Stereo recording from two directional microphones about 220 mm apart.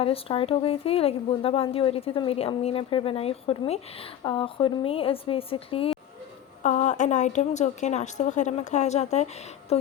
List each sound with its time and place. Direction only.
0.0 s a woman's voice: 25° left (ahead or behind)